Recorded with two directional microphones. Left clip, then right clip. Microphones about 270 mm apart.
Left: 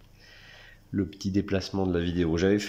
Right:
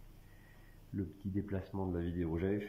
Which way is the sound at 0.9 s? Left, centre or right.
Left.